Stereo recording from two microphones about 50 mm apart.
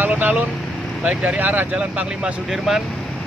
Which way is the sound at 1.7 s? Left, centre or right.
Centre.